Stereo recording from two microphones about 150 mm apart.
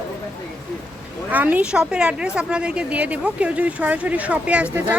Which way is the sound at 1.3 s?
10° right (ahead or behind).